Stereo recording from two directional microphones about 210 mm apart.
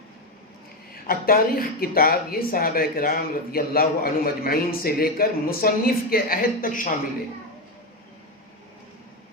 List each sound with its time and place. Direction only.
1.0 s speech: 45° left (ahead or behind)